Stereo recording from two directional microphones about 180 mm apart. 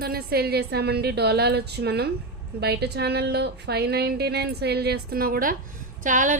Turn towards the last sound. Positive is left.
turn(degrees=-45)  # may be behind; listen again after turning